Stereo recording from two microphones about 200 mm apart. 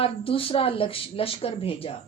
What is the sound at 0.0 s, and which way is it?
A woman's voice, 25° left (ahead or behind).